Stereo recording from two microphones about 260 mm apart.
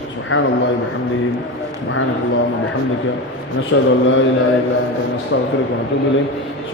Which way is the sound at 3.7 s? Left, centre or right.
Left.